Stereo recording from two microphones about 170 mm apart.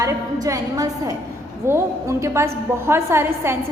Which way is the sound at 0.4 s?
20° right (ahead or behind).